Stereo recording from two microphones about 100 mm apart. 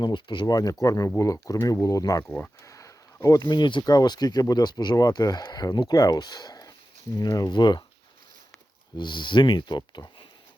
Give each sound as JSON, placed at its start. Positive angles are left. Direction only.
{"t": 0.0, "sound": "speech", "side_deg": 50}
{"t": 2.6, "sound": "a sound", "side_deg": 30}
{"t": 3.4, "sound": "speech", "side_deg": 50}
{"t": 9.0, "sound": "speech", "side_deg": 50}